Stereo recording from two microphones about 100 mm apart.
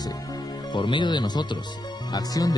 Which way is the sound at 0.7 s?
50° left (ahead or behind).